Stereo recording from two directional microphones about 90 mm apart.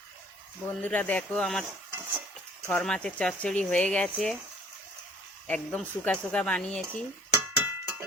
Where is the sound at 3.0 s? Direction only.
15° left (ahead or behind).